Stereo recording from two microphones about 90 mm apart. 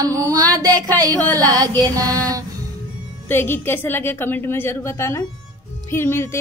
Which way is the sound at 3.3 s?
25° left (ahead or behind).